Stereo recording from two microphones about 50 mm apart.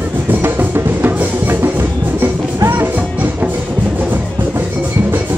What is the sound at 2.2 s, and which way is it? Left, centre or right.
Music, right.